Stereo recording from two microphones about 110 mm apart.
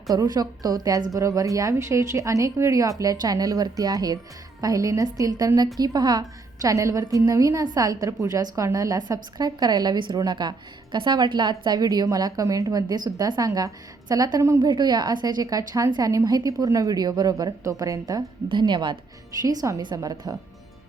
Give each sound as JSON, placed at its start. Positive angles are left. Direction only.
{"t": 0.1, "sound": "a woman's voice", "side_deg": -35}
{"t": 18.4, "sound": "a woman's voice", "side_deg": -45}
{"t": 19.4, "sound": "a woman's voice", "side_deg": -30}